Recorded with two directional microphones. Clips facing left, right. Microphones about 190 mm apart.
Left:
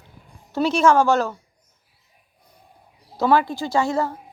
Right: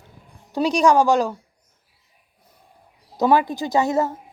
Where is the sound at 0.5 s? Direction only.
15° right (ahead or behind).